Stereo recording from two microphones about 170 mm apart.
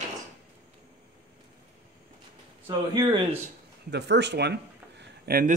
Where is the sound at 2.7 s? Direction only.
20° right (ahead or behind).